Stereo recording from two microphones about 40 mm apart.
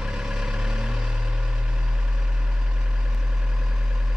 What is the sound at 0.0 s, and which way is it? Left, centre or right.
Vehicle, centre.